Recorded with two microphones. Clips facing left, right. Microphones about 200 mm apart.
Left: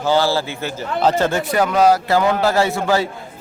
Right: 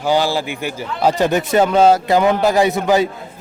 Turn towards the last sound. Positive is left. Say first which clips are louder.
# right 3 dB
turn(degrees=-20)  # may be behind; listen again after turning